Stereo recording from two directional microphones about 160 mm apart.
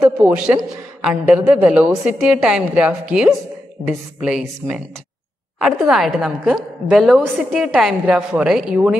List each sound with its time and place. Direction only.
0.2 s a man's voice: 5° right (ahead or behind)